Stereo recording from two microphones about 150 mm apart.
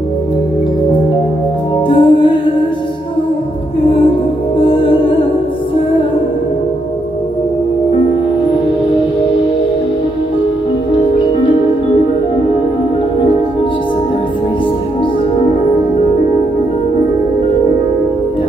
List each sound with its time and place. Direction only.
1.9 s music: 35° left (ahead or behind)
4.6 s music: 35° left (ahead or behind)